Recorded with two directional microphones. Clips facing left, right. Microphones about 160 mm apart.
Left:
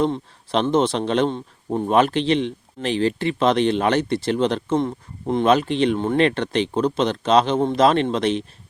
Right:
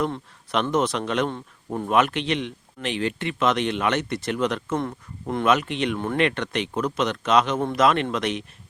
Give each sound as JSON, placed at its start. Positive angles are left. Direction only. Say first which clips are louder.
{"t": 0.0, "sound": "a man's voice", "louder": "left 5 dB", "side_deg": 30}